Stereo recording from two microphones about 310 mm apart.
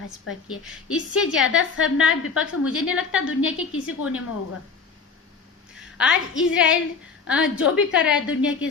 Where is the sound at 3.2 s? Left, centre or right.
Left.